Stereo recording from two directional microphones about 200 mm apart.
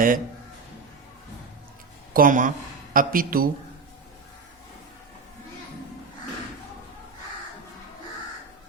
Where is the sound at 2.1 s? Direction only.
40° right (ahead or behind).